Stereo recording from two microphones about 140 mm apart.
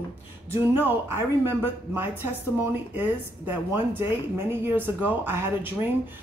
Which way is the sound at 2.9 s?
15° right (ahead or behind).